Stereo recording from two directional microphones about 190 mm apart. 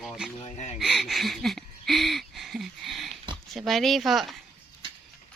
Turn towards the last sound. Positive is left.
turn(degrees=0)  # may be behind; listen again after turning